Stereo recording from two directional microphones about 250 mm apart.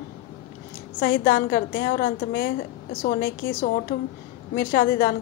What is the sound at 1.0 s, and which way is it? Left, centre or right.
A woman's voice, left.